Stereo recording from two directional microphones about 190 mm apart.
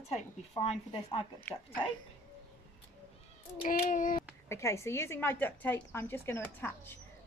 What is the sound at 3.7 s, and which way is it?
Child singing, 45° left (ahead or behind).